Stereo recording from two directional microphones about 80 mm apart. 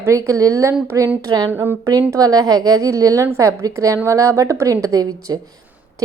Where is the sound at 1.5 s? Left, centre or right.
Right.